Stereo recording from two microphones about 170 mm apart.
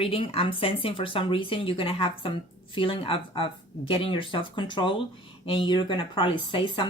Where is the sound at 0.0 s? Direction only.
35° left (ahead or behind).